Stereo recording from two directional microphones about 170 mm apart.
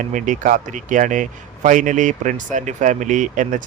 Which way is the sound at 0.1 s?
50° right (ahead or behind).